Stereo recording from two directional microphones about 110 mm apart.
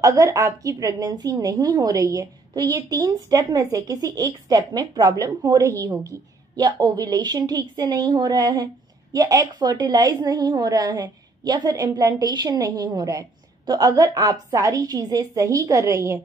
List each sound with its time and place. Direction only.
0.0 s a woman's voice: 30° right (ahead or behind)